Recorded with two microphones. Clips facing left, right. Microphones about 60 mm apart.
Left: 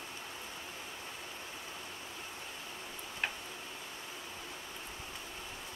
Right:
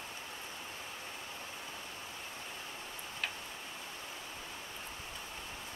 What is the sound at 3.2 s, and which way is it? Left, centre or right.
Tick-tock, left.